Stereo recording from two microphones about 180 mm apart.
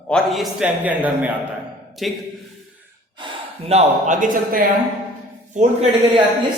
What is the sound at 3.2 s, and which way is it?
Speech, 30° right (ahead or behind).